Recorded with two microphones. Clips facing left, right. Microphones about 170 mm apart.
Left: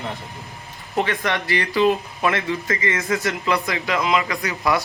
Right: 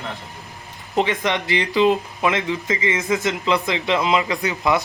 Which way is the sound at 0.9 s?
20° right (ahead or behind).